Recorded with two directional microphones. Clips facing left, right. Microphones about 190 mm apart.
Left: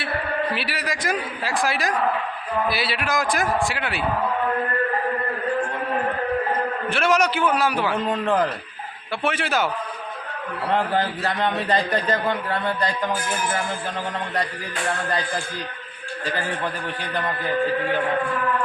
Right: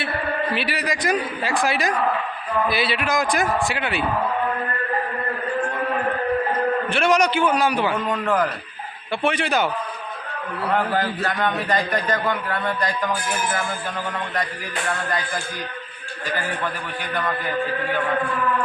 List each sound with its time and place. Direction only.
0.5 s a man's voice: centre (ahead or behind)
6.9 s a man's voice: centre (ahead or behind)
8.0 s a man's voice: 25° left (ahead or behind)
9.2 s a man's voice: 5° left (ahead or behind)
10.9 s a man's voice: 30° left (ahead or behind)